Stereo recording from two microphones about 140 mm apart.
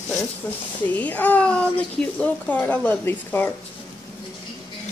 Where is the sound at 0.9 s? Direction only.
10° left (ahead or behind).